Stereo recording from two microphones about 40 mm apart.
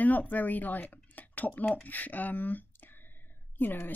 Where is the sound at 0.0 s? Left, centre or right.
Left.